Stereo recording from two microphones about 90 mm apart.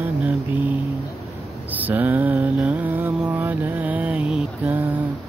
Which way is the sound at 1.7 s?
20° right (ahead or behind).